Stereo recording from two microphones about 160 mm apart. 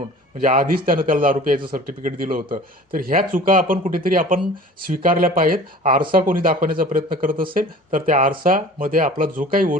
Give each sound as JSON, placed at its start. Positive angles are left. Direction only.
{"t": 0.3, "sound": "speech", "side_deg": -60}